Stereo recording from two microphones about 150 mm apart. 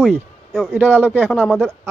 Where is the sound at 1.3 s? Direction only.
5° left (ahead or behind).